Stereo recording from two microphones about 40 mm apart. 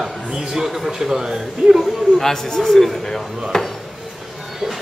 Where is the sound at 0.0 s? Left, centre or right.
Centre.